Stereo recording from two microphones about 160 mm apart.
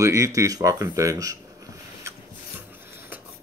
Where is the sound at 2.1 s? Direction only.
20° right (ahead or behind).